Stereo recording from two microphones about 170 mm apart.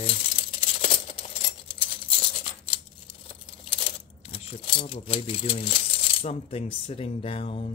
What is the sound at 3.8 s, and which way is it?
Speech, 35° left (ahead or behind).